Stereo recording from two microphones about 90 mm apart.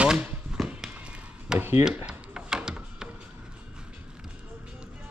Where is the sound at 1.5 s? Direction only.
25° right (ahead or behind).